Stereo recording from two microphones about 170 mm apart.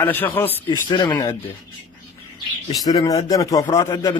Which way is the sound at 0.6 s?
25° left (ahead or behind).